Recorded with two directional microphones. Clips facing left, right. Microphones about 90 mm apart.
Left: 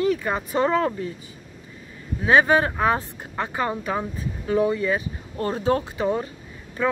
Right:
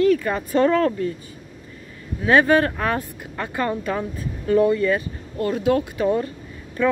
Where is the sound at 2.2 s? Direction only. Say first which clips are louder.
Right 1 dB; 20° left (ahead or behind).